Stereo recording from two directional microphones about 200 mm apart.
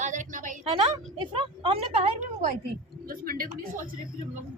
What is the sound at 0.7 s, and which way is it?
A woman's voice, 25° right (ahead or behind).